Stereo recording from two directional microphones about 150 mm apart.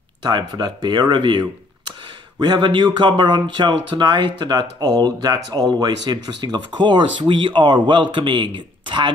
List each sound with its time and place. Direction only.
0.2 s speech: 30° right (ahead or behind)
2.4 s speech: 30° right (ahead or behind)